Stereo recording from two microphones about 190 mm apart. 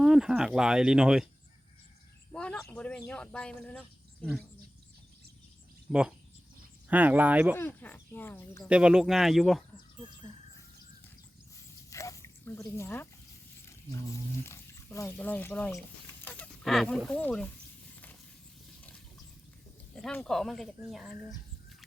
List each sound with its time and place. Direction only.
0.0 s speech: 5° right (ahead or behind)
2.3 s a sound: 5° left (ahead or behind)
2.6 s speech: 5° left (ahead or behind)
5.9 s speech: 5° right (ahead or behind)
7.5 s speech: 10° left (ahead or behind)
8.6 s speech: 5° right (ahead or behind)
11.9 s a sound: 15° left (ahead or behind)
12.7 s speech: 10° left (ahead or behind)
14.4 s speech: 15° left (ahead or behind)
20.0 s speech: 5° left (ahead or behind)